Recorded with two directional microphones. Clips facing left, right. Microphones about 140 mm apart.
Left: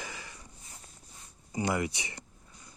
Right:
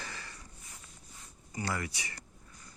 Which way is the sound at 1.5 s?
20° left (ahead or behind).